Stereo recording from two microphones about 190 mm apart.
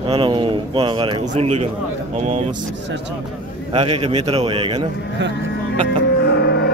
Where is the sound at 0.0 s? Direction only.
25° right (ahead or behind).